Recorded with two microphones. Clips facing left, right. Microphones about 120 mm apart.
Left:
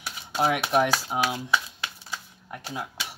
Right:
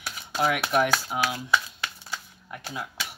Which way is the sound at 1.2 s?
Centre (ahead or behind).